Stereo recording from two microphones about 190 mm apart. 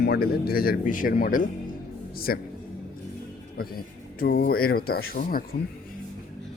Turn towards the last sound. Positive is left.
turn(degrees=50)  # may be behind; listen again after turning